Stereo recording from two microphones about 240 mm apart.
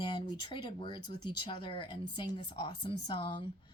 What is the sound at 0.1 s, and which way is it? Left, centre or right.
Speech, centre.